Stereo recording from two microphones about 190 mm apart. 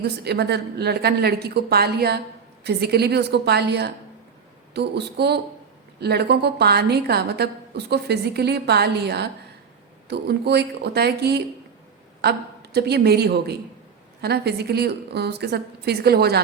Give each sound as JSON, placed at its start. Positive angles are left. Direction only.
{"t": 0.0, "sound": "a woman's voice", "side_deg": -60}